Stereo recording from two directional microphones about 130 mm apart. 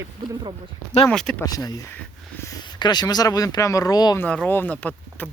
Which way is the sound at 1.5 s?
30° left (ahead or behind).